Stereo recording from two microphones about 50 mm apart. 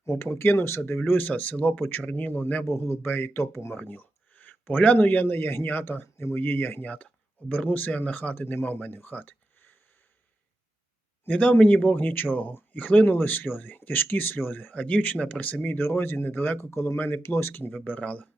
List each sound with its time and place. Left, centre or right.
0.0 s speech: left
1.0 s speech: left
2.6 s speech: left
3.7 s a sound: left
4.9 s speech: left
6.8 s speech: left
11.3 s speech: left
16.7 s speech: left
17.7 s speech: left